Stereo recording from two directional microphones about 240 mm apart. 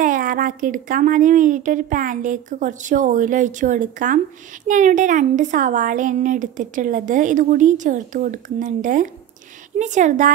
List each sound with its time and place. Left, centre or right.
0.0 s speech: right